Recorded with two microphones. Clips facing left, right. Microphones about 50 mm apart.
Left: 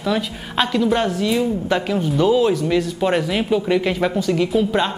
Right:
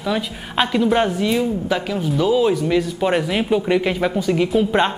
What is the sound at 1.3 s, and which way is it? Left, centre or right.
A woman's voice, centre.